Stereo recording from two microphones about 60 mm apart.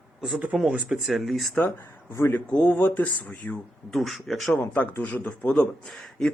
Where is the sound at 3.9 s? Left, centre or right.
Centre.